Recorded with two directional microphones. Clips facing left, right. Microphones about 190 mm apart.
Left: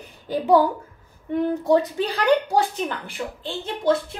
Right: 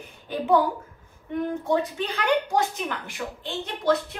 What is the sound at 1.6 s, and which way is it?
A woman's voice, 35° left (ahead or behind).